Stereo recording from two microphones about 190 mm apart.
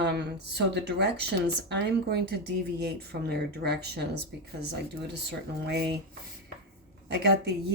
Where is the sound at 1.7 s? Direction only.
60° right (ahead or behind).